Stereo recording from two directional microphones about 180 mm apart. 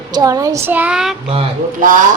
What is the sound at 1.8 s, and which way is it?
Speech, 50° right (ahead or behind).